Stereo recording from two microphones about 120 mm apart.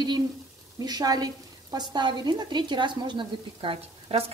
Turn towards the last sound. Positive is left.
turn(degrees=-55)  # may be behind; listen again after turning